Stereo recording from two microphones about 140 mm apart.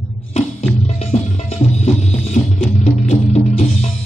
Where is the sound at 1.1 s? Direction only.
45° left (ahead or behind).